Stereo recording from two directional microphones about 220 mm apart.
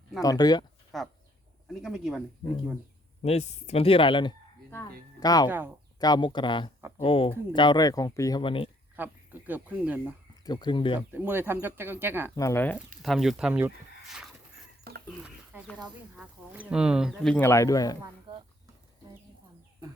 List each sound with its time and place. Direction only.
0.2 s speech: 15° left (ahead or behind)
0.9 s bird: centre (ahead or behind)
1.6 s speech: centre (ahead or behind)
3.2 s speech: 30° left (ahead or behind)
9.0 s speech: 10° right (ahead or behind)
10.4 s speech: 20° left (ahead or behind)
11.1 s speech: 10° right (ahead or behind)
12.4 s speech: 10° left (ahead or behind); by 14.3 s 5° right (ahead or behind)
14.9 s a sound: 45° right (ahead or behind)
15.5 s a sound: 10° right (ahead or behind)
16.1 s speech: 5° right (ahead or behind); by 17.9 s 15° left (ahead or behind)
18.0 s a sound: 20° right (ahead or behind)